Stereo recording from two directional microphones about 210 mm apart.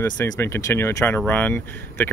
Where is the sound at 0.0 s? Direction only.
10° left (ahead or behind).